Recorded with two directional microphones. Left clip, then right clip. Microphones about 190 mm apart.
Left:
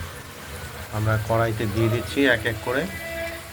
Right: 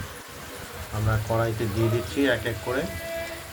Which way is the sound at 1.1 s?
15° left (ahead or behind).